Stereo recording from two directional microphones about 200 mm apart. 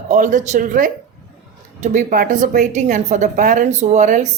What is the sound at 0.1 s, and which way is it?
A woman's voice, 40° right (ahead or behind).